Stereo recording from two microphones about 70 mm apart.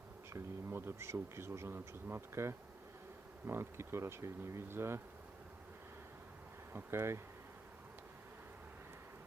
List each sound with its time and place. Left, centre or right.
0.3 s speech: right
6.7 s speech: right